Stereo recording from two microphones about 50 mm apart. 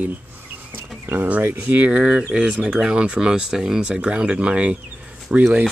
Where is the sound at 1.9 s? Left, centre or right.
Right.